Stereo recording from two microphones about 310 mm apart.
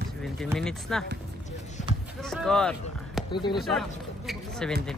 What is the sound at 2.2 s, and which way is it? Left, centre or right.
Speech, centre.